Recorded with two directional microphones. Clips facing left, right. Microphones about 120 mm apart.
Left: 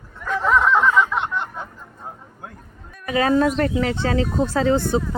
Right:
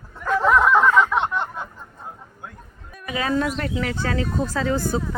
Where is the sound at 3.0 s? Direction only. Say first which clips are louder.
Left 5 dB; 40° left (ahead or behind).